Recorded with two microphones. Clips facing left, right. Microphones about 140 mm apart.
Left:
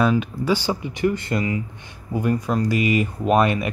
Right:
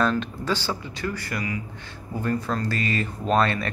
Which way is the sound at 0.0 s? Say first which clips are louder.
Left 4 dB; 10° left (ahead or behind).